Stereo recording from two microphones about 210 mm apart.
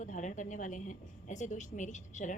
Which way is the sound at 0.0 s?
35° left (ahead or behind).